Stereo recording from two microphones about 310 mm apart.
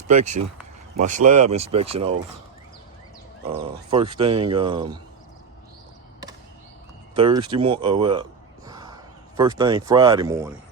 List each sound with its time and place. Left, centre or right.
0.9 s speech: right
3.4 s speech: centre
7.2 s speech: centre